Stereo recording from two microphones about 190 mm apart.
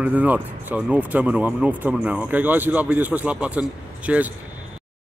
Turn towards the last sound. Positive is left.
turn(degrees=-5)  # may be behind; listen again after turning